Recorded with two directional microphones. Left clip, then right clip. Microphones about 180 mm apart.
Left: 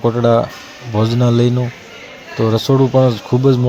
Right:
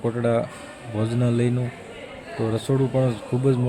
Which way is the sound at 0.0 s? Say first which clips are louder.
Left 10 dB; 25° left (ahead or behind).